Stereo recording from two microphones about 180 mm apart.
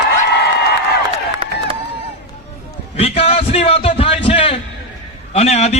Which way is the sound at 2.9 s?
35° left (ahead or behind).